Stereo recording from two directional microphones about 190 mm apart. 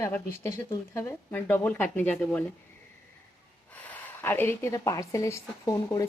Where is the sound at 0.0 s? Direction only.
10° left (ahead or behind).